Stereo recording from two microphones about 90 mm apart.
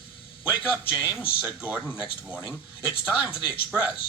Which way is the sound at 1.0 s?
10° right (ahead or behind).